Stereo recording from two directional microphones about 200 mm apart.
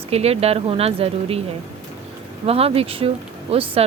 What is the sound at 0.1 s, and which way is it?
Speech, 30° right (ahead or behind).